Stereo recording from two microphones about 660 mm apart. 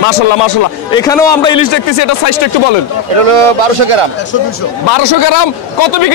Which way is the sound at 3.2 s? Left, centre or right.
Right.